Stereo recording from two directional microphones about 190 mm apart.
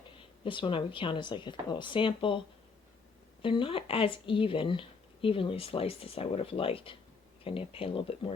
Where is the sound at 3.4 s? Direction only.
25° left (ahead or behind).